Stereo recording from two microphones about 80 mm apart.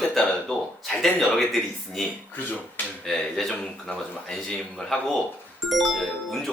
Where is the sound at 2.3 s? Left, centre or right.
Left.